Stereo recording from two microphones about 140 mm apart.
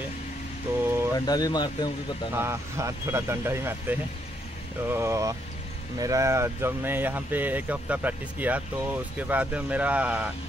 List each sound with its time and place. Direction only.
1.1 s speech: 30° left (ahead or behind)
2.3 s speech: 20° right (ahead or behind)